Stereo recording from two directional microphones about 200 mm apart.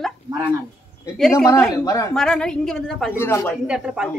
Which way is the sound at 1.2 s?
Centre (ahead or behind).